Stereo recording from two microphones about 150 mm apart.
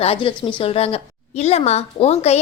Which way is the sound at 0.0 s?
40° left (ahead or behind).